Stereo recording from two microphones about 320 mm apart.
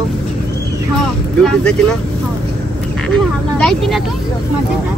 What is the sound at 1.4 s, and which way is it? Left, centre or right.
Speech, centre.